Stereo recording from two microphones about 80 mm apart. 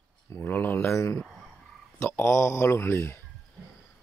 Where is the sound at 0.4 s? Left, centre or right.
Left.